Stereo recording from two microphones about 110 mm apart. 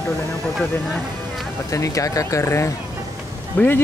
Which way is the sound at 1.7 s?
30° left (ahead or behind).